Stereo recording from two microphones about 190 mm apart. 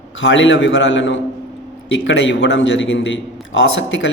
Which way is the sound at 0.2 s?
75° left (ahead or behind).